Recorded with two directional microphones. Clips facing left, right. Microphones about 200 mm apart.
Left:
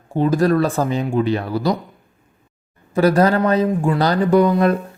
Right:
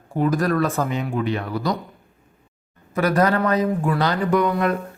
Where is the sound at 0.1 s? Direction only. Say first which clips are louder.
Left 4 dB; 25° left (ahead or behind).